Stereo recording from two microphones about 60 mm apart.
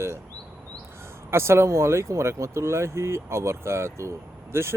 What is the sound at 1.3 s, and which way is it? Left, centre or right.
Speech, right.